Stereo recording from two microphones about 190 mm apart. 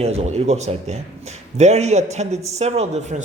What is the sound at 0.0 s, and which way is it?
Speech, 35° right (ahead or behind).